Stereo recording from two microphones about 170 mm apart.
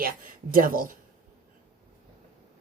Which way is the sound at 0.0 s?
55° right (ahead or behind).